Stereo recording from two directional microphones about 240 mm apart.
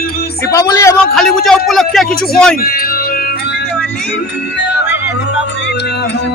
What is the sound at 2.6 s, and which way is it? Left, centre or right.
Music, left.